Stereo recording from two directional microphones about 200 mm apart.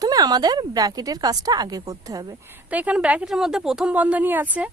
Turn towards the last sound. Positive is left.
turn(degrees=-10)  # may be behind; listen again after turning